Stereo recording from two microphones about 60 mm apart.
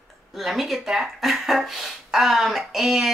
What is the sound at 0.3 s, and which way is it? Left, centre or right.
Speech, centre.